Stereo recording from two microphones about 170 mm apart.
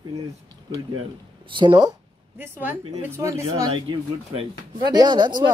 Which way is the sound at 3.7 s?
30° right (ahead or behind).